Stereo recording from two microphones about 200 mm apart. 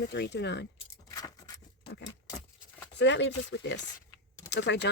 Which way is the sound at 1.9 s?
65° left (ahead or behind).